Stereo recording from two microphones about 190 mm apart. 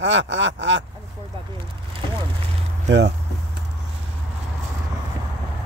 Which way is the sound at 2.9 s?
65° right (ahead or behind).